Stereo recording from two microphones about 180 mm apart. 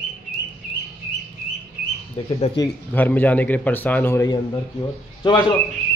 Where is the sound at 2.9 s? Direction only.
10° left (ahead or behind).